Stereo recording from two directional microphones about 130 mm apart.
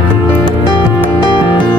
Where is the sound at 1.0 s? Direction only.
40° left (ahead or behind).